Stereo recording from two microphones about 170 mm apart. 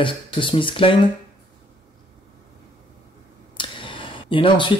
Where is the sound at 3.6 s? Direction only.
30° left (ahead or behind).